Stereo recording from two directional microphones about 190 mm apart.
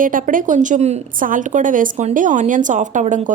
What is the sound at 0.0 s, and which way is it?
Speech, 45° right (ahead or behind).